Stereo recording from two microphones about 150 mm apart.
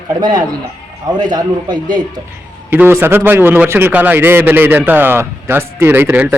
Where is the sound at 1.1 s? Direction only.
25° right (ahead or behind).